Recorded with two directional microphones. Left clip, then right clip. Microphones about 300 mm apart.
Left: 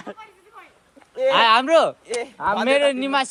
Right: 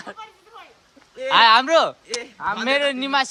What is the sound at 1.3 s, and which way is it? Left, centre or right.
A man's voice, centre.